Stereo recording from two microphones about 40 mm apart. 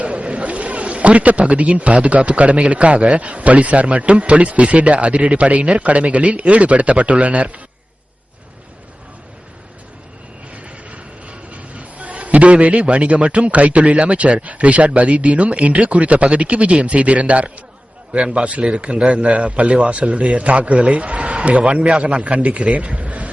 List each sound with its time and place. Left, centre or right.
0.0 s a man's voice: right
10.5 s a sound: right
14.4 s a man's voice: right